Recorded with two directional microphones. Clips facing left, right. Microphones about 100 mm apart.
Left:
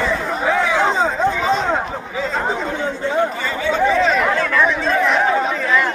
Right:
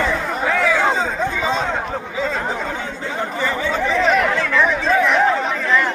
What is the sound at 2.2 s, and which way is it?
Chatter, 30° left (ahead or behind).